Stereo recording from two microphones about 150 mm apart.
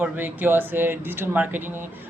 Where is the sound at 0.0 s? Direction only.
15° right (ahead or behind).